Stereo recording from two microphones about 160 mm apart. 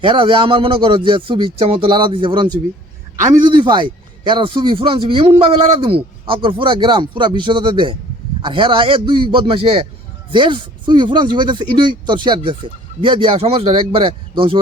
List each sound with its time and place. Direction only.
0.0 s speech: 30° right (ahead or behind)